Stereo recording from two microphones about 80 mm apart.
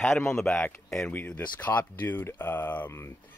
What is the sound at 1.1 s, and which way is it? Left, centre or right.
Speech, left.